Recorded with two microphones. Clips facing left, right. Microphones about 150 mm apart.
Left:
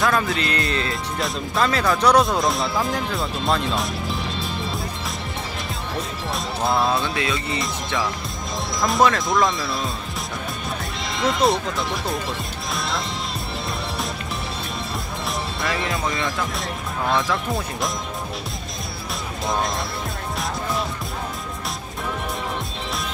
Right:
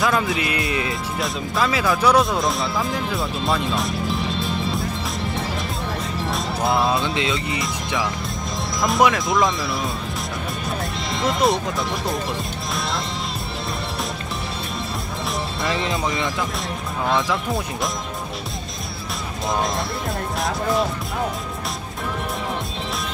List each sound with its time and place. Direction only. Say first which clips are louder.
0.1 s speech: even; 15° right (ahead or behind)
6.3 s music: even; centre (ahead or behind)
7.0 s speech: right 2 dB; 25° right (ahead or behind)
7.6 s speech: right 1 dB; centre (ahead or behind)
11.1 s speech: even; centre (ahead or behind)
15.7 s speech: right 2 dB; 25° right (ahead or behind)
17.1 s speech: right 1 dB; centre (ahead or behind)